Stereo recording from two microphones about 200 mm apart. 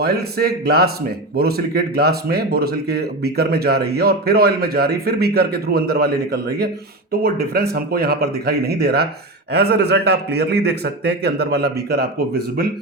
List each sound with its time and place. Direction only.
0.0 s a man's voice: 50° right (ahead or behind)